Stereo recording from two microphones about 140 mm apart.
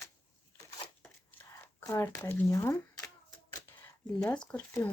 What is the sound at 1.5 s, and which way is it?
Speech, 20° left (ahead or behind).